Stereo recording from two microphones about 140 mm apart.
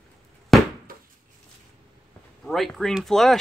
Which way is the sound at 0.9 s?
90° right.